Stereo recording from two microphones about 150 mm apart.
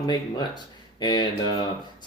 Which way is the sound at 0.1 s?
30° left (ahead or behind).